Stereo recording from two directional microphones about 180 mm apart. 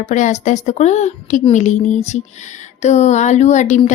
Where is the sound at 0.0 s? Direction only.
40° left (ahead or behind).